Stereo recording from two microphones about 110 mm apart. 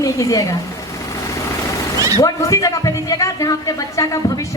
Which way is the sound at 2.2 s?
30° left (ahead or behind).